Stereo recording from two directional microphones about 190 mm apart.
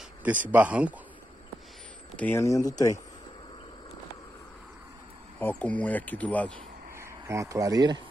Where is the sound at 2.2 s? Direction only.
10° left (ahead or behind).